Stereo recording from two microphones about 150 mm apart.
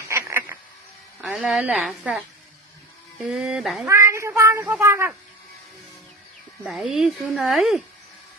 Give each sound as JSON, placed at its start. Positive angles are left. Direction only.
{"t": 0.1, "sound": "insect", "side_deg": -15}
{"t": 1.2, "sound": "speech", "side_deg": 0}
{"t": 3.8, "sound": "speech", "side_deg": -20}
{"t": 6.7, "sound": "speech", "side_deg": 0}